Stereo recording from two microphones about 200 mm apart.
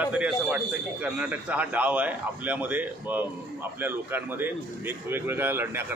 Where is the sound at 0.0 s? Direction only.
5° right (ahead or behind).